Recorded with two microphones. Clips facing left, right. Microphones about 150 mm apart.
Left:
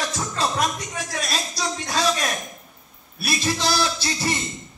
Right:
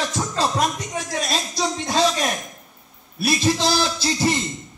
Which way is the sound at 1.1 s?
25° right (ahead or behind).